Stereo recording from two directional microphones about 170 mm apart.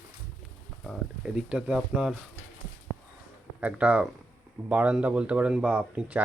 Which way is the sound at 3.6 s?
5° right (ahead or behind).